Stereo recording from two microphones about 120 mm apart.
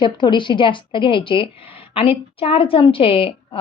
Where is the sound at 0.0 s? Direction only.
40° left (ahead or behind).